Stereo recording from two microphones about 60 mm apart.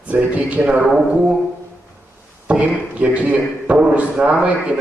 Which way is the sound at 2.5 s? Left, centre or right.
Right.